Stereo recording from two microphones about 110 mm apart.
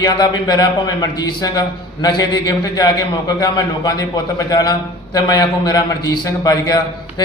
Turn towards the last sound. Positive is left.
turn(degrees=35)  # may be behind; listen again after turning